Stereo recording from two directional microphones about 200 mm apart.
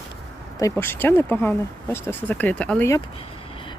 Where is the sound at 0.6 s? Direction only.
10° left (ahead or behind).